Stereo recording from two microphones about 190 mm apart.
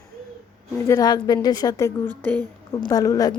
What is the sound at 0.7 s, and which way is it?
A woman's voice, 15° left (ahead or behind).